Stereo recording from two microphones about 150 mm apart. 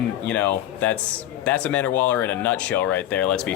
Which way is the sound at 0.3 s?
10° left (ahead or behind).